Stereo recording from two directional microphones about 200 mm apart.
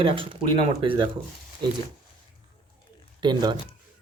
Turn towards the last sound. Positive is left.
turn(degrees=-20)  # may be behind; listen again after turning